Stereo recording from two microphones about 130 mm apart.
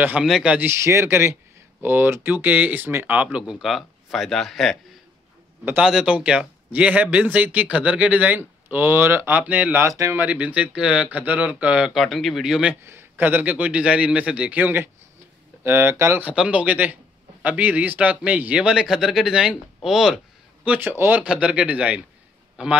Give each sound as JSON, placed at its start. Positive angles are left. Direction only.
{"t": 0.0, "sound": "a man's voice", "side_deg": -10}
{"t": 0.7, "sound": "a man's voice", "side_deg": -20}
{"t": 10.2, "sound": "a man's voice", "side_deg": -10}
{"t": 12.8, "sound": "a man's voice", "side_deg": -15}